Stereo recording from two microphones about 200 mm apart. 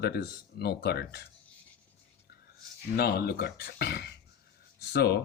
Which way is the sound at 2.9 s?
50° left (ahead or behind).